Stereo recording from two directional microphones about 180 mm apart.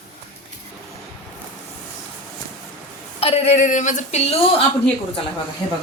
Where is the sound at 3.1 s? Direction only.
35° left (ahead or behind).